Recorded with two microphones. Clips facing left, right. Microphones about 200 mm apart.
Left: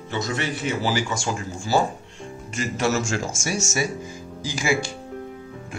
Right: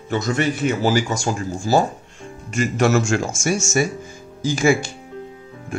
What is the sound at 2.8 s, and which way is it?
Speech, 60° right (ahead or behind).